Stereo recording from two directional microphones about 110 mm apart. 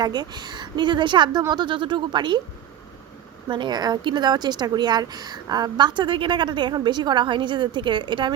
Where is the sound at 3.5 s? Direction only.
45° right (ahead or behind).